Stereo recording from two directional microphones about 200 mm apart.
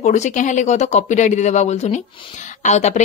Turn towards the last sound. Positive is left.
turn(degrees=35)  # may be behind; listen again after turning